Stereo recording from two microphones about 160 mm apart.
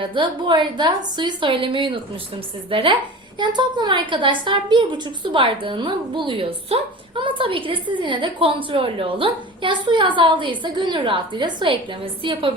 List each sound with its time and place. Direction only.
0.0 s a woman's voice: 30° right (ahead or behind)